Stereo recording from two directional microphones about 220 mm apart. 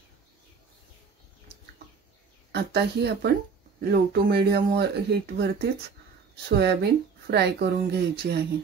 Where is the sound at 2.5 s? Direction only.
50° right (ahead or behind).